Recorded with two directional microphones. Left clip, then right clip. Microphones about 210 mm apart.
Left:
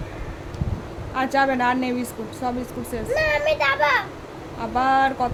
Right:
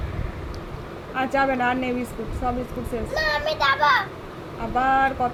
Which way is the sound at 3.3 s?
25° right (ahead or behind).